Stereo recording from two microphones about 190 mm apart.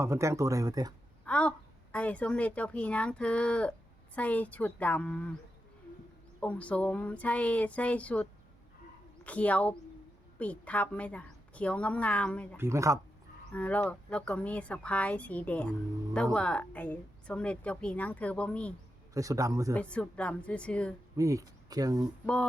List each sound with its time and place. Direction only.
0.0 s speech: 15° right (ahead or behind)
1.2 s a woman's voice: 5° left (ahead or behind)
6.4 s a woman's voice: 5° left (ahead or behind)
12.5 s speech: 15° right (ahead or behind)
13.5 s a woman's voice: 5° left (ahead or behind)
19.1 s speech: 15° right (ahead or behind)
19.7 s a woman's voice: 5° left (ahead or behind)
21.2 s speech: 15° right (ahead or behind)